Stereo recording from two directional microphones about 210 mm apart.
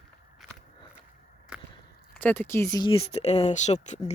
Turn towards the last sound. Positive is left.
turn(degrees=35)  # may be behind; listen again after turning